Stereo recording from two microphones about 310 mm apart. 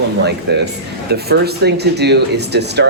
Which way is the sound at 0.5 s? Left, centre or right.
Right.